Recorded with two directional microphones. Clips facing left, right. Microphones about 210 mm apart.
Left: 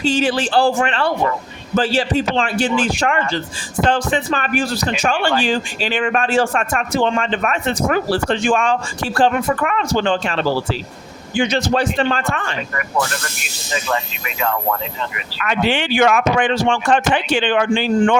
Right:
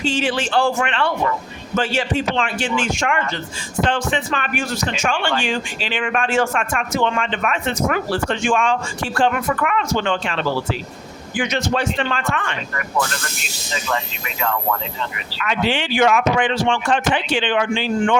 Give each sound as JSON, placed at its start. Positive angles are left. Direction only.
{"t": 0.0, "sound": "speech", "side_deg": 40}
{"t": 15.4, "sound": "speech", "side_deg": 50}